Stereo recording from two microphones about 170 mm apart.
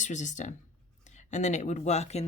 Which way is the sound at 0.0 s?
45° left (ahead or behind).